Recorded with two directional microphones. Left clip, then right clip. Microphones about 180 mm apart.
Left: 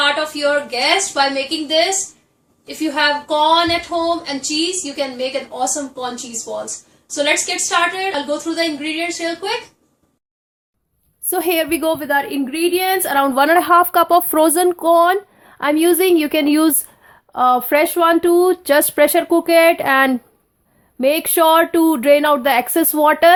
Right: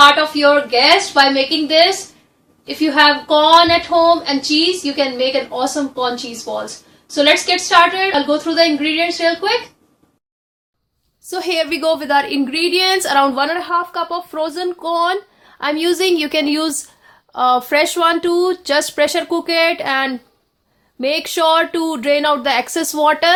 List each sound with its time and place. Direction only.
0.0 s speech: 10° left (ahead or behind)
7.1 s speech: 10° left (ahead or behind)
11.3 s a woman's voice: 35° left (ahead or behind)
11.8 s a woman's voice: 10° left (ahead or behind)
13.3 s a woman's voice: 30° left (ahead or behind)
13.6 s speech: 50° left (ahead or behind); by 23.3 s 20° left (ahead or behind)